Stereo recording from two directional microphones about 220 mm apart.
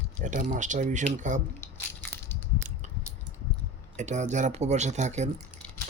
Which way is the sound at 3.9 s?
35° right (ahead or behind).